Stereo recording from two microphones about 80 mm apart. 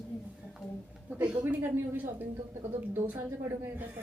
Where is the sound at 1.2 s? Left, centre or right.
Right.